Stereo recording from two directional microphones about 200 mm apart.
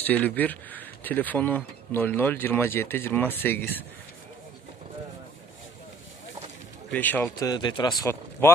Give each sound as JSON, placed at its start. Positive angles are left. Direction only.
{"t": 0.0, "sound": "speech", "side_deg": 10}
{"t": 6.9, "sound": "speech", "side_deg": 10}